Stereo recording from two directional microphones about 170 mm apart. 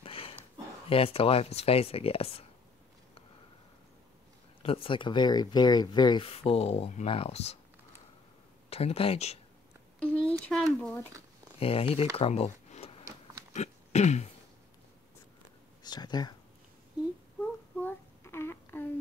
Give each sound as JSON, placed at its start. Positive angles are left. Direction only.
{"t": 0.0, "sound": "a sound", "side_deg": 35}
{"t": 0.8, "sound": "speech", "side_deg": 35}
{"t": 4.6, "sound": "speech", "side_deg": 30}
{"t": 8.6, "sound": "speech", "side_deg": 35}
{"t": 9.9, "sound": "speech", "side_deg": 5}
{"t": 11.6, "sound": "speech", "side_deg": 35}
{"t": 12.2, "sound": "a sound", "side_deg": 40}
{"t": 13.5, "sound": "throat clearing", "side_deg": 40}
{"t": 15.8, "sound": "speech", "side_deg": 25}
{"t": 17.4, "sound": "a sound", "side_deg": 10}